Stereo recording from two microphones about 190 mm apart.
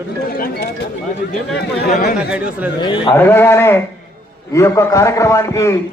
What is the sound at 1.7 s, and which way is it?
Speech, 55° left (ahead or behind).